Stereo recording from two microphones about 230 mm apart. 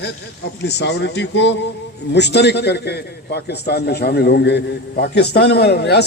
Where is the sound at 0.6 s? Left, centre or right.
Left.